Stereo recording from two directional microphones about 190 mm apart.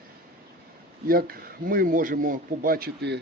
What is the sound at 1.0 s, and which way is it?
Speech, 50° right (ahead or behind).